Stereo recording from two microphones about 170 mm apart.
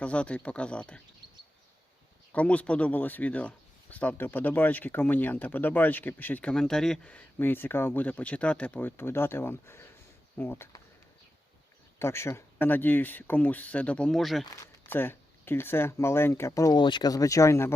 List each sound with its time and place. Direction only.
0.0 s speech: 5° left (ahead or behind)
2.3 s speech: 10° left (ahead or behind)
11.9 s speech: 15° left (ahead or behind)
14.4 s speech: 20° left (ahead or behind)